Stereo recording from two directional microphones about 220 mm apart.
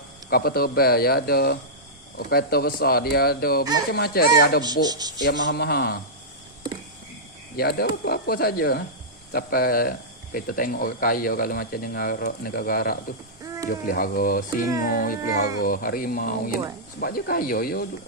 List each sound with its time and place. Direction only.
0.3 s speech: 45° left (ahead or behind)
4.6 s speech: 20° right (ahead or behind)
5.2 s speech: 55° left (ahead or behind)
7.5 s speech: 45° left (ahead or behind)
13.4 s a sound: 15° right (ahead or behind)
13.7 s speech: 40° left (ahead or behind)